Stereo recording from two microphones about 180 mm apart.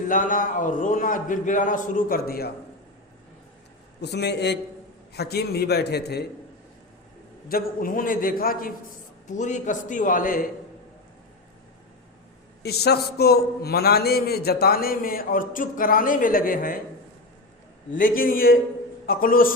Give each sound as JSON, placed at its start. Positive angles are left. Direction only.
{"t": 0.1, "sound": "a man's voice", "side_deg": 50}
{"t": 4.0, "sound": "a man's voice", "side_deg": 65}
{"t": 7.4, "sound": "a man's voice", "side_deg": 55}
{"t": 9.2, "sound": "a man's voice", "side_deg": 45}
{"t": 12.6, "sound": "a man's voice", "side_deg": 60}
{"t": 17.9, "sound": "a man's voice", "side_deg": 50}